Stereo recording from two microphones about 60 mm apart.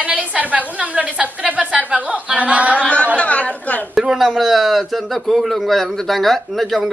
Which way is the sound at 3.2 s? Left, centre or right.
Left.